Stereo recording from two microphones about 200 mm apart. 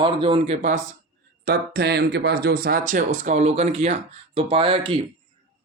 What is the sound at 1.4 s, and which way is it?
Speech, 50° right (ahead or behind).